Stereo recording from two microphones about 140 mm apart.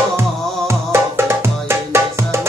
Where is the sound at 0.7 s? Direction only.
20° right (ahead or behind).